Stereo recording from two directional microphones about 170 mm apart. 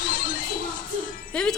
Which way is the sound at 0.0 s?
50° left (ahead or behind).